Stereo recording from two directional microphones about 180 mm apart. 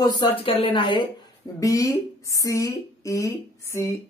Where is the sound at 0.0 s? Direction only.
30° left (ahead or behind).